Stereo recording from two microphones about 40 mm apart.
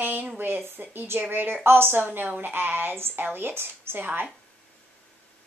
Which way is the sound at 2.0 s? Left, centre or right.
Right.